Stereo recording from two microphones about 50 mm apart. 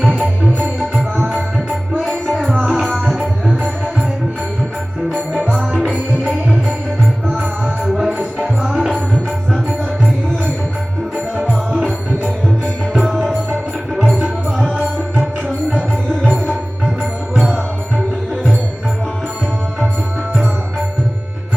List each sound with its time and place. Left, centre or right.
0.4 s music: right
1.2 s tabla: right
2.5 s tabla: centre
6.2 s music: centre
7.9 s music: centre
8.7 s tabla: centre
12.9 s music: centre
17.3 s music: centre
20.3 s music: centre